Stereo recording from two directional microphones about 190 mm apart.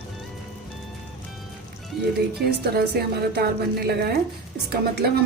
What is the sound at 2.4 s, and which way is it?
A woman's voice, 55° right (ahead or behind).